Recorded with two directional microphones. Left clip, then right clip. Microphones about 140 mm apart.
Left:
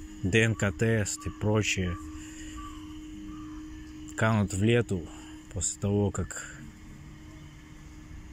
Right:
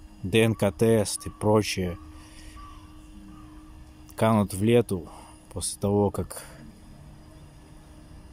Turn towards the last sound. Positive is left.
turn(degrees=-30)  # may be behind; listen again after turning